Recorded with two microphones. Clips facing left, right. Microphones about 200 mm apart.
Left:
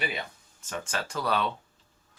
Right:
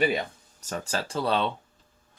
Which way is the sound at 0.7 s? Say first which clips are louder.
Right 3 dB; 35° right (ahead or behind).